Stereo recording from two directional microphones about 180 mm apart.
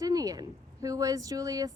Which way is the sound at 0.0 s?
20° right (ahead or behind).